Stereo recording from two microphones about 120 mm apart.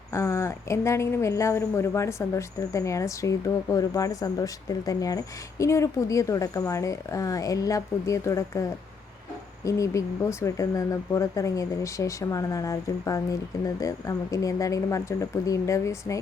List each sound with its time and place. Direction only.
0.1 s speech: 25° left (ahead or behind)
9.6 s speech: 25° left (ahead or behind)